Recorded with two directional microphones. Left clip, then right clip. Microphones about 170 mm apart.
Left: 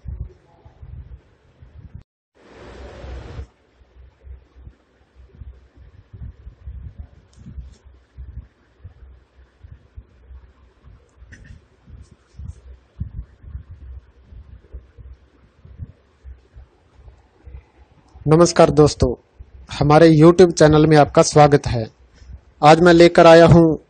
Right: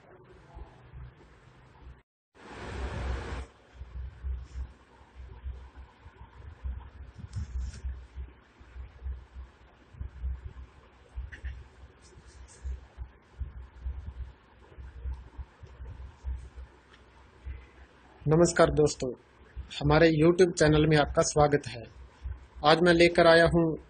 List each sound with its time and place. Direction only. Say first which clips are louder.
18.5 s speech: left 11 dB; 55° left (ahead or behind)